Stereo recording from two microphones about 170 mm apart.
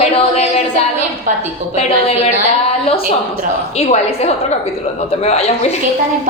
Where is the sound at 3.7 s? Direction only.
40° left (ahead or behind).